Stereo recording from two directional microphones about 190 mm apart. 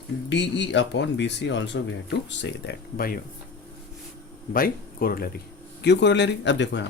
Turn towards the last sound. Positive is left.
turn(degrees=70)  # may be behind; listen again after turning